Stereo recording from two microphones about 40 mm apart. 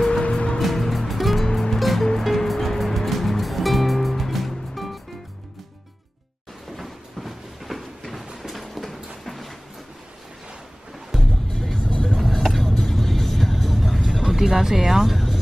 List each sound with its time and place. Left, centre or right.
0.2 s music: left
0.6 s music: centre
6.8 s a sound: centre
11.1 s music: centre
11.5 s music: centre
12.1 s music: centre
14.0 s music: centre